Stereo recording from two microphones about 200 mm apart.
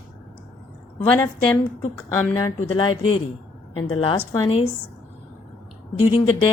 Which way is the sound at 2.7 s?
25° left (ahead or behind).